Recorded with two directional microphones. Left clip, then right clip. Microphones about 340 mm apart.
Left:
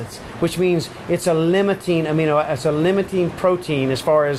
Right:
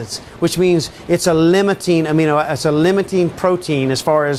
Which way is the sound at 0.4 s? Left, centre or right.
Right.